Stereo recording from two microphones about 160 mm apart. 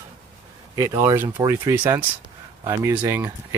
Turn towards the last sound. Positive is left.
turn(degrees=-15)  # may be behind; listen again after turning